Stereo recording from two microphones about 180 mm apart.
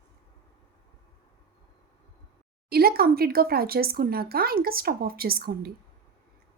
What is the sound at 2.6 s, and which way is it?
Speech, 60° right (ahead or behind).